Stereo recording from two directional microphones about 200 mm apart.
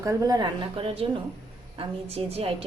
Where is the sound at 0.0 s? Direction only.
15° right (ahead or behind).